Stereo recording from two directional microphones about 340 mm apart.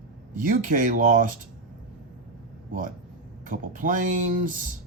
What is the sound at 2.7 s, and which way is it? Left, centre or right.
Speech, right.